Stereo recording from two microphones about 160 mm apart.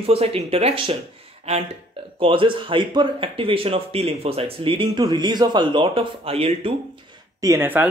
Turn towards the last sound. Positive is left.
turn(degrees=-15)  # may be behind; listen again after turning